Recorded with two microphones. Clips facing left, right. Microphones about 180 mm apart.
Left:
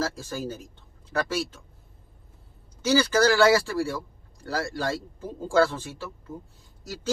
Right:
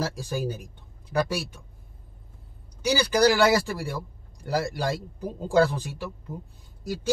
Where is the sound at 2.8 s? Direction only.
15° right (ahead or behind).